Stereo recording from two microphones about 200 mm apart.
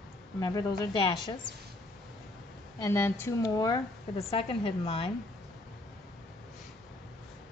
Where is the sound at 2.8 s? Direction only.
15° left (ahead or behind); by 5.1 s 30° left (ahead or behind).